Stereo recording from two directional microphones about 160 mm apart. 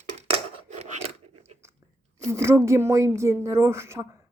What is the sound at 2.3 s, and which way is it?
Speech, 15° right (ahead or behind).